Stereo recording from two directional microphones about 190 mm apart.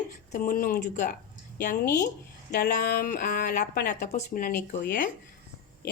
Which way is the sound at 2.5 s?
55° left (ahead or behind).